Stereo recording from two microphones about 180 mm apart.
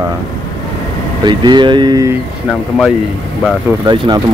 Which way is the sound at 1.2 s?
25° right (ahead or behind).